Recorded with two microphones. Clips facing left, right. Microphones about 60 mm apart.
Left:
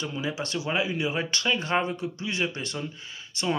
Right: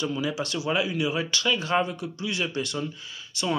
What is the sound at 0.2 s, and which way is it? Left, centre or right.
Speech, left.